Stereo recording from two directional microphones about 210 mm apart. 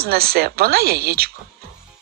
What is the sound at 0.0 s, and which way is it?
A woman's voice, 45° right (ahead or behind).